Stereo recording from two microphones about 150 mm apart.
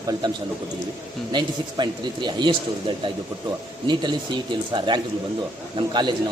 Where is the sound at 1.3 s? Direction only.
30° right (ahead or behind).